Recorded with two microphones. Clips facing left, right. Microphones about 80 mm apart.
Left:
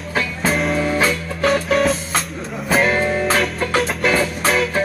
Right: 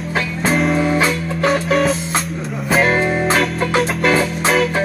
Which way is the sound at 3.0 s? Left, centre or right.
Right.